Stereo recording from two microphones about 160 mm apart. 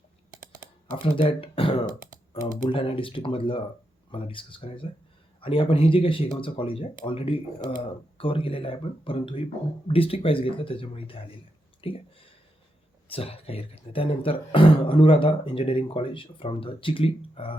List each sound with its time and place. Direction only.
1.0 s speech: 35° left (ahead or behind)
11.8 s a sound: 35° left (ahead or behind)
13.1 s speech: 35° left (ahead or behind)